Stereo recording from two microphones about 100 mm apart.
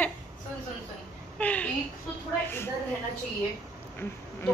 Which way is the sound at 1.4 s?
15° left (ahead or behind).